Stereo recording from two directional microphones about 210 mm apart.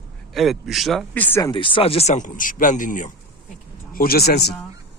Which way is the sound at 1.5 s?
25° left (ahead or behind).